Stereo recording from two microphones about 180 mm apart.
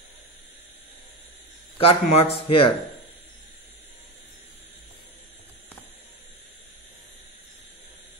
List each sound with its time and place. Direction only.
1.8 s speech: 35° left (ahead or behind)